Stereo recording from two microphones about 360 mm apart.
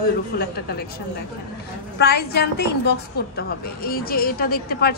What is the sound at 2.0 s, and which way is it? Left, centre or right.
A woman's voice, left.